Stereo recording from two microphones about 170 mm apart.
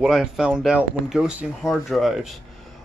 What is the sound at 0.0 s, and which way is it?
Speech, 5° right (ahead or behind).